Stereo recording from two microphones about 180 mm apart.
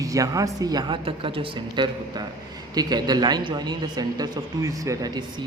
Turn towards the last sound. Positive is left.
turn(degrees=-25)  # may be behind; listen again after turning